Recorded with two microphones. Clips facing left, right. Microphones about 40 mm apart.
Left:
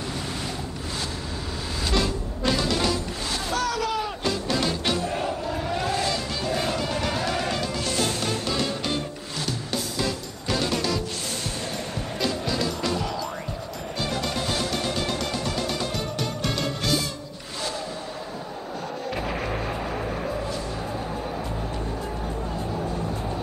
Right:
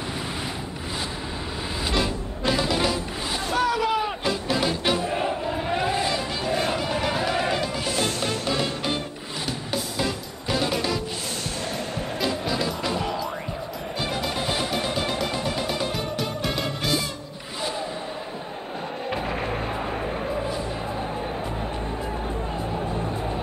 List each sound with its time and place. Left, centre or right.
1.9 s music: centre
12.3 s music: centre
17.6 s crowd: centre
23.0 s a sound: centre